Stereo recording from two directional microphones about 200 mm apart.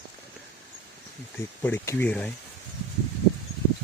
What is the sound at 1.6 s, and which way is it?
Speech, 10° left (ahead or behind).